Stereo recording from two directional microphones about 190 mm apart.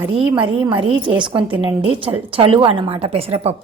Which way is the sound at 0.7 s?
25° right (ahead or behind).